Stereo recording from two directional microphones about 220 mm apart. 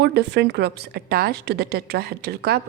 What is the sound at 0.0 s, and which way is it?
A woman's voice, 50° right (ahead or behind).